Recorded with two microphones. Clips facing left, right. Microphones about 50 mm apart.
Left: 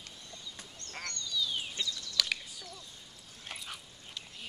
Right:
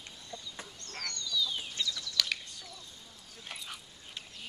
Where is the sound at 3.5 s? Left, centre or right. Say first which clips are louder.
Even; centre.